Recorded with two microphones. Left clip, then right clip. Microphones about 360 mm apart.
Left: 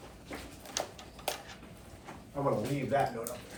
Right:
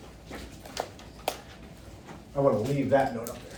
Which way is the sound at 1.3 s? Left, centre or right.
Right.